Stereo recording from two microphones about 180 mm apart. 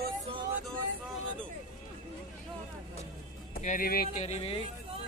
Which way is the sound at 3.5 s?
50° left (ahead or behind).